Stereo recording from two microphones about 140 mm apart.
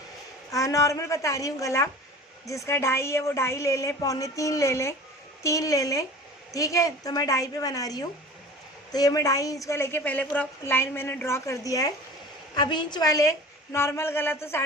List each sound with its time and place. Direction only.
0.5 s a woman's voice: 25° left (ahead or behind)